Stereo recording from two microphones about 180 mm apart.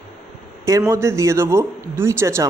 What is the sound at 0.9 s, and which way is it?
Speech, 15° right (ahead or behind).